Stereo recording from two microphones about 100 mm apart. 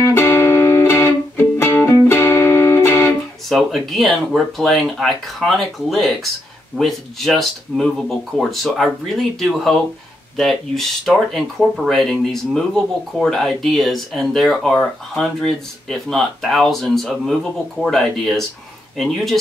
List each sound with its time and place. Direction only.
0.0 s music: 25° left (ahead or behind)
3.4 s speech: centre (ahead or behind)